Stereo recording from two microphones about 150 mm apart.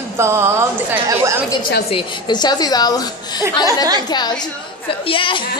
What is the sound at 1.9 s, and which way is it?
A woman's voice, 35° left (ahead or behind).